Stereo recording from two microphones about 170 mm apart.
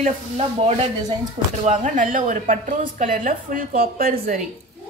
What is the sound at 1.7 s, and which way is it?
A woman's voice, 50° right (ahead or behind).